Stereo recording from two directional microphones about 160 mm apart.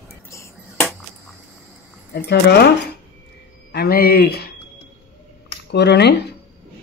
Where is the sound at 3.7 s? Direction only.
80° left.